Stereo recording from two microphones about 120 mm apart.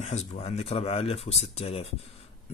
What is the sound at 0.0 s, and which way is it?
Speech, 70° left (ahead or behind).